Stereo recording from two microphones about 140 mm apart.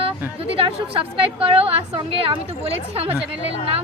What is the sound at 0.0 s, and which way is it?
A woman's voice, 45° right (ahead or behind).